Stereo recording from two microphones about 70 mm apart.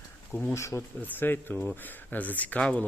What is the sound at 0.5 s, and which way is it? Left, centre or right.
Speech, left.